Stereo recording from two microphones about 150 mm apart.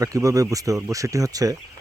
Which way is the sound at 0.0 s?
20° right (ahead or behind).